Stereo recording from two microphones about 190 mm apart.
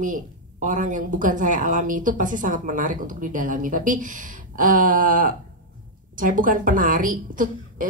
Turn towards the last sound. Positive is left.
turn(degrees=-45)  # may be behind; listen again after turning